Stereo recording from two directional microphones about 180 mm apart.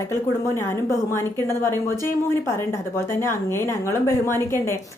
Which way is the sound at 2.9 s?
15° left (ahead or behind).